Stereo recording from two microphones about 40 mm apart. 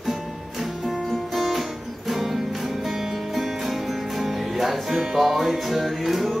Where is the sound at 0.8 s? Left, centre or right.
Centre.